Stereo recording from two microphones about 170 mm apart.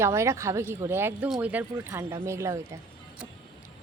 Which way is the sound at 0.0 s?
15° right (ahead or behind).